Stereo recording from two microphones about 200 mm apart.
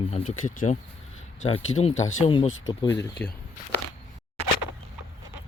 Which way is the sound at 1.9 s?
85° left.